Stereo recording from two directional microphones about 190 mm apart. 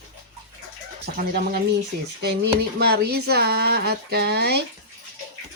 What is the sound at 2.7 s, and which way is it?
Speech, 55° right (ahead or behind).